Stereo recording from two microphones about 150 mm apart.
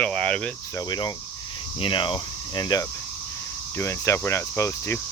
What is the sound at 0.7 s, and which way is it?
Speech, 30° left (ahead or behind).